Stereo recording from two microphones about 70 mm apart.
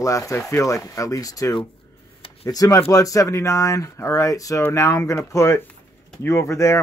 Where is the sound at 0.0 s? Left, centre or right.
Left.